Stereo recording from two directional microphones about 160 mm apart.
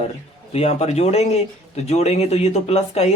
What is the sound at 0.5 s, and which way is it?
Speech, 40° left (ahead or behind).